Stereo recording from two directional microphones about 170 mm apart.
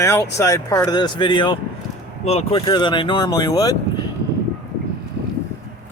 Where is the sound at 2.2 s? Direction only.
35° left (ahead or behind); by 3.8 s 20° left (ahead or behind).